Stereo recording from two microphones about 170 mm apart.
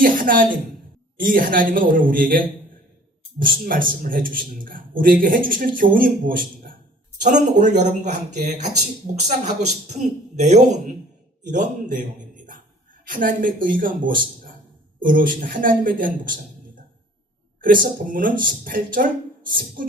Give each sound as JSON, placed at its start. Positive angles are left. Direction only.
{"t": 0.0, "sound": "a man's voice", "side_deg": -55}
{"t": 3.4, "sound": "a man's voice", "side_deg": -55}
{"t": 7.2, "sound": "speech", "side_deg": -45}
{"t": 13.1, "sound": "a man's voice", "side_deg": -55}
{"t": 17.6, "sound": "a man's voice", "side_deg": -55}